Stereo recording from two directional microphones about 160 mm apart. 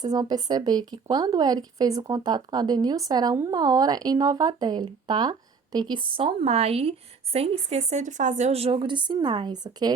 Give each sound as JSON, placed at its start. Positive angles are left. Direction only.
{"t": 0.0, "sound": "speech", "side_deg": -25}
{"t": 6.1, "sound": "speech", "side_deg": -40}